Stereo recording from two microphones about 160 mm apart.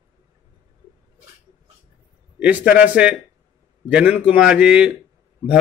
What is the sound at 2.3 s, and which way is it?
Speech, 10° right (ahead or behind).